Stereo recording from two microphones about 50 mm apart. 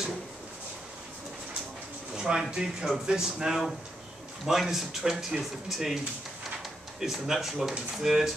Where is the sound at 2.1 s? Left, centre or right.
Centre.